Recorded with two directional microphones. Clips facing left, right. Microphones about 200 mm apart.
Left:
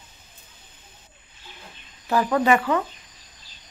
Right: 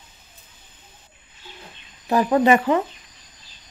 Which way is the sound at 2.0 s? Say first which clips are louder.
Right 3 dB; 20° right (ahead or behind).